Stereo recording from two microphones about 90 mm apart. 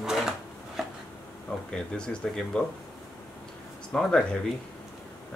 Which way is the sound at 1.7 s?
10° left (ahead or behind).